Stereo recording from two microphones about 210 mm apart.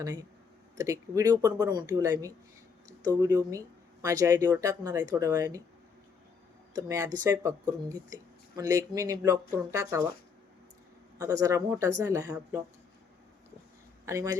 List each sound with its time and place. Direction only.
0.0 s speech: 20° right (ahead or behind)
6.7 s speech: 15° right (ahead or behind)
11.2 s speech: 15° right (ahead or behind)
14.0 s speech: 15° right (ahead or behind)